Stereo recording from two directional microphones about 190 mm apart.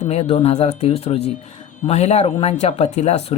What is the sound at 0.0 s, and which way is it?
Speech, 35° left (ahead or behind).